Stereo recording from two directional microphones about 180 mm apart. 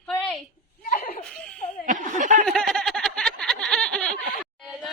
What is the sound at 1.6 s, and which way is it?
Laughter, 45° left (ahead or behind).